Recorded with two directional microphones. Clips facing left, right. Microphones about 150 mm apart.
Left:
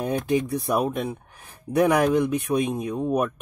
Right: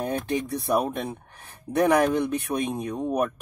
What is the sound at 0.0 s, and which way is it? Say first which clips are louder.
Speech: left 3 dB; 10° left (ahead or behind).